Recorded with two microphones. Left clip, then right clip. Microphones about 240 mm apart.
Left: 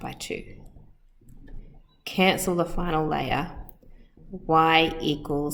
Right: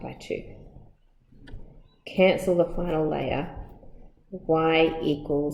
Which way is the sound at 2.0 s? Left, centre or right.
Left.